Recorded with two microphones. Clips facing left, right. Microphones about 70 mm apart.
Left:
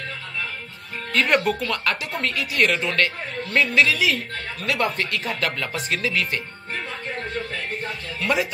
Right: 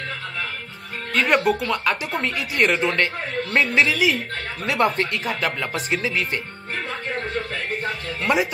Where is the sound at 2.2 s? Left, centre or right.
Right.